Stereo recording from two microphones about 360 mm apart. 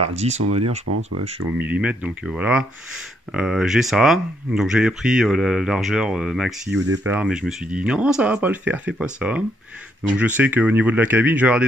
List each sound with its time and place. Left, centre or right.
0.5 s speech: centre
0.8 s speech: right
1.2 s speech: centre